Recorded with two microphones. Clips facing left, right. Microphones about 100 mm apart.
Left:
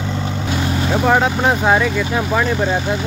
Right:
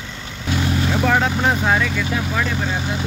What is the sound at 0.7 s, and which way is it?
Speech, 15° left (ahead or behind).